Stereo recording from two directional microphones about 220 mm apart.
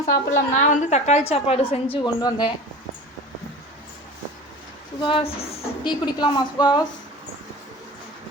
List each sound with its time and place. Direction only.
0.1 s a woman's voice: 35° left (ahead or behind); by 2.5 s 20° left (ahead or behind)
4.9 s a woman's voice: 25° left (ahead or behind)